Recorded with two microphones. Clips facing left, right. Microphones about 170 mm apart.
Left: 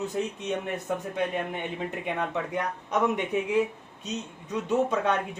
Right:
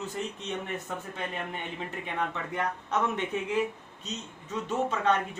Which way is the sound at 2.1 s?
15° left (ahead or behind).